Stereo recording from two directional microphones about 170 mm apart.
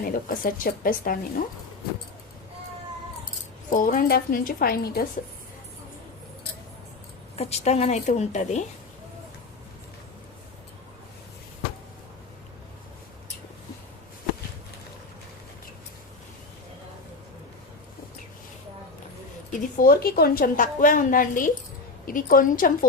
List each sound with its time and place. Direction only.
0.0 s speech: 55° left (ahead or behind)
3.7 s speech: 55° left (ahead or behind)
7.3 s a woman's voice: 40° left (ahead or behind)
19.5 s a woman's voice: 50° left (ahead or behind)